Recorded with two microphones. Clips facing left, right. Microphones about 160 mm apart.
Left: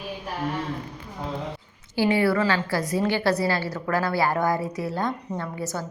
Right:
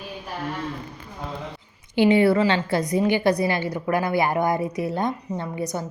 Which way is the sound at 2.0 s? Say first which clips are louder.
Right 4 dB; 20° right (ahead or behind).